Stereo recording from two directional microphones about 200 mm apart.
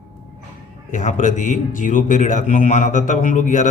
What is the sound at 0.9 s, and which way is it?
A man's voice, 40° left (ahead or behind).